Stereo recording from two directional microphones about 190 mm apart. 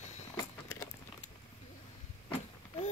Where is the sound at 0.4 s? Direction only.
15° left (ahead or behind).